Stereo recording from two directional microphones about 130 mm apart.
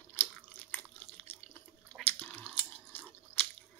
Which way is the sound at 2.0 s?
15° left (ahead or behind).